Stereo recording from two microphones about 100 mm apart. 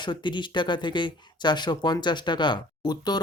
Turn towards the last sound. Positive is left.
turn(degrees=45)  # may be behind; listen again after turning